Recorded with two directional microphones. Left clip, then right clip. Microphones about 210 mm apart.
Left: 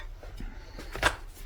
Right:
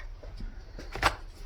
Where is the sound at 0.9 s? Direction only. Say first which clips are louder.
Even; 10° right (ahead or behind).